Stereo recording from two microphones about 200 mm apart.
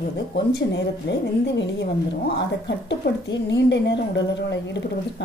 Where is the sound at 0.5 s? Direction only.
60° left (ahead or behind).